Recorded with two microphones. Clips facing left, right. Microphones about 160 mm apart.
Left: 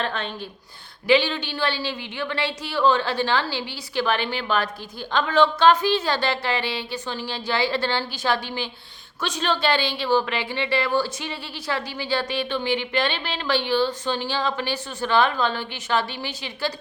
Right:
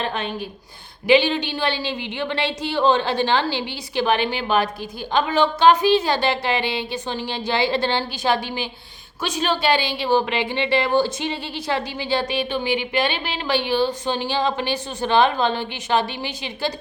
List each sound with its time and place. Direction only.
0.0 s a woman's voice: 15° right (ahead or behind)